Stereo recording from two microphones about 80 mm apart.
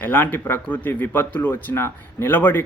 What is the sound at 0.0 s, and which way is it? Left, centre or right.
Speech, left.